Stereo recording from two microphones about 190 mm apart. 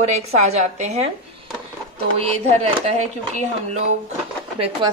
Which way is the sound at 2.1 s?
35° right (ahead or behind).